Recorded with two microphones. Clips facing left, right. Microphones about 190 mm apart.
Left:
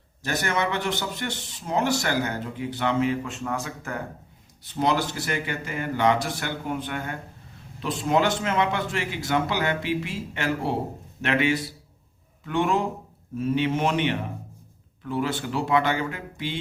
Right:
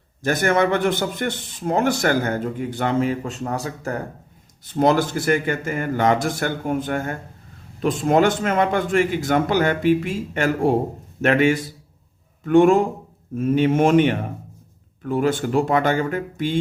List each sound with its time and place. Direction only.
0.2 s a man's voice: 50° right (ahead or behind)